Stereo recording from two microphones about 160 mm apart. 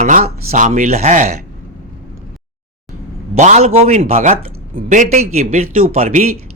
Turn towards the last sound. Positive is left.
turn(degrees=-45)  # may be behind; listen again after turning